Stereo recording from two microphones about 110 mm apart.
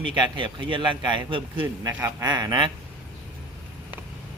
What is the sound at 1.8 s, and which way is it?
Speech, 25° right (ahead or behind).